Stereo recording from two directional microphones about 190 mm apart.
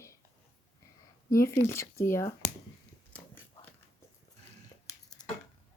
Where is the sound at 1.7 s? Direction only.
15° left (ahead or behind).